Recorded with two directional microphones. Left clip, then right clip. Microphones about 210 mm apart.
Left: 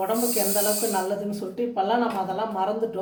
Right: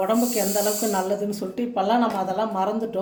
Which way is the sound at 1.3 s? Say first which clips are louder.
Right 1 dB; 45° right (ahead or behind).